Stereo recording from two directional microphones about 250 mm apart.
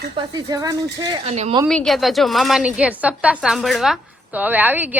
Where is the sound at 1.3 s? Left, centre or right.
Right.